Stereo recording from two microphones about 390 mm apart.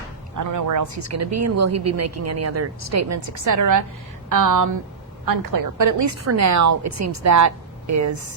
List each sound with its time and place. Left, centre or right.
0.3 s a woman's voice: right